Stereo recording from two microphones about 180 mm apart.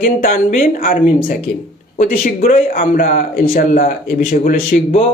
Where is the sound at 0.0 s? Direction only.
50° left (ahead or behind).